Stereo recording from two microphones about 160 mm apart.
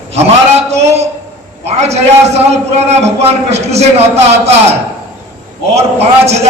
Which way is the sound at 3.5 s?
40° right (ahead or behind).